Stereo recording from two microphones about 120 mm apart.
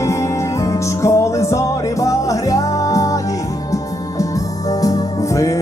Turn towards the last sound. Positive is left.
turn(degrees=25)  # may be behind; listen again after turning